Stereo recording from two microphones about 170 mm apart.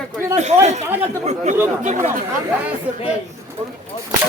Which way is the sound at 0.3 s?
40° right (ahead or behind).